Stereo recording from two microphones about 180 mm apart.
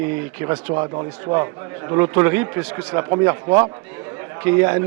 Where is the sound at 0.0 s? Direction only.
15° right (ahead or behind).